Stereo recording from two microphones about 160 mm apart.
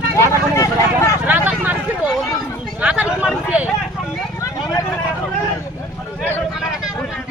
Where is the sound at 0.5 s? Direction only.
20° left (ahead or behind).